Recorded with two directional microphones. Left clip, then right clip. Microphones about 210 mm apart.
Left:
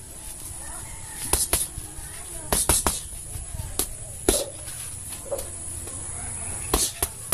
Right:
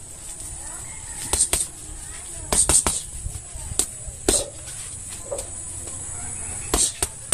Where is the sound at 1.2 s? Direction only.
Centre (ahead or behind).